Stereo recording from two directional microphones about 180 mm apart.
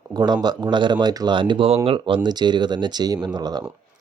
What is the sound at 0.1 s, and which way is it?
Speech, 20° right (ahead or behind).